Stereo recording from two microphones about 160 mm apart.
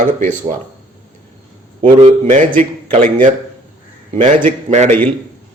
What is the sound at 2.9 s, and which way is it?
Speech, 50° right (ahead or behind).